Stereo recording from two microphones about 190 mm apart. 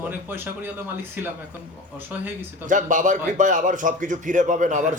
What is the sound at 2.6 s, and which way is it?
A man's voice, 45° right (ahead or behind).